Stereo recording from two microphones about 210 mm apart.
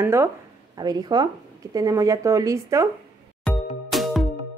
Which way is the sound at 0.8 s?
20° right (ahead or behind).